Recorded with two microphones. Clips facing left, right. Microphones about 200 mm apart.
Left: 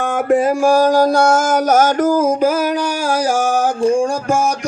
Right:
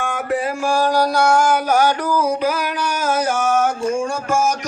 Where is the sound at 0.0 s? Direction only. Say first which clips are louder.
Left 7 dB; 45° left (ahead or behind).